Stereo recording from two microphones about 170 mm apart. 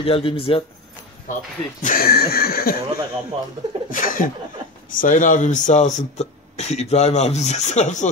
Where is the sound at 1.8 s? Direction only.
60° left (ahead or behind).